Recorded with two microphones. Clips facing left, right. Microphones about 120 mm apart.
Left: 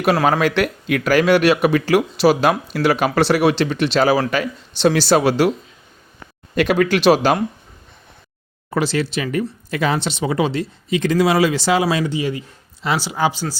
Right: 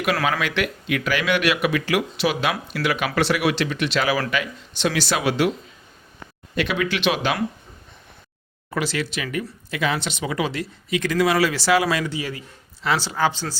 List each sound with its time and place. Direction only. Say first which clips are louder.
0.0 s speech: left 6 dB; 35° left (ahead or behind)
6.6 s speech: left 7 dB; 45° left (ahead or behind)
8.7 s speech: left 6 dB; 30° left (ahead or behind); by 13.6 s 10° left (ahead or behind)